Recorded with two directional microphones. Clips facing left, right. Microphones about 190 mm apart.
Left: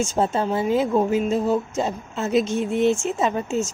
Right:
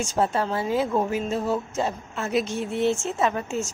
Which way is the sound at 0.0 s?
25° left (ahead or behind).